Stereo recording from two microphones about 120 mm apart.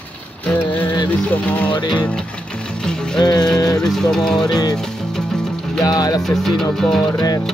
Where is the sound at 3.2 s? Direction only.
35° left (ahead or behind).